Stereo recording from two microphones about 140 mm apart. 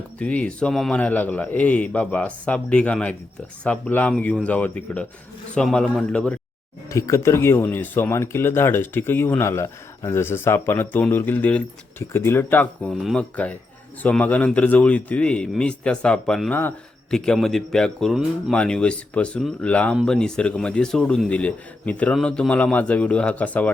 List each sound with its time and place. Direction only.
0.2 s speech: 10° left (ahead or behind)
6.9 s speech: 20° left (ahead or behind)
13.0 s a man's voice: centre (ahead or behind)